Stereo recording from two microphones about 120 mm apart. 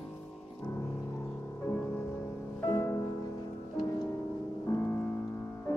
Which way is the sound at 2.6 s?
20° left (ahead or behind).